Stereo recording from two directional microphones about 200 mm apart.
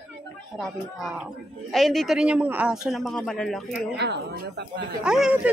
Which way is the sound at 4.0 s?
55° right (ahead or behind).